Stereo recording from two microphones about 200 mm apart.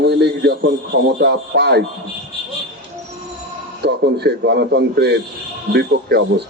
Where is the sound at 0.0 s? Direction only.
55° right (ahead or behind).